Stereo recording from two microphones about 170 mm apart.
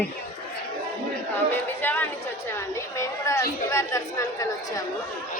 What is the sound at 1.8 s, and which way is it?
A woman's voice, 10° left (ahead or behind).